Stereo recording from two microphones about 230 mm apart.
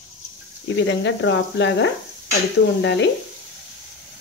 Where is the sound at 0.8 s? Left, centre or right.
Left.